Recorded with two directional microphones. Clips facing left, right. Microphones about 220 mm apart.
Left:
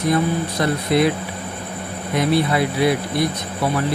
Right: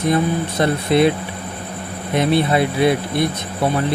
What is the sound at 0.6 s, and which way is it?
Speech, 25° right (ahead or behind).